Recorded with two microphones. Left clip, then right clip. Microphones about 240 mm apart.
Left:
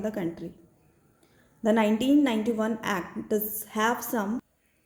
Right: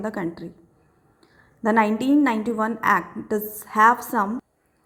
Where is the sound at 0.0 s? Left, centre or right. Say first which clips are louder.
Right 3 dB; centre.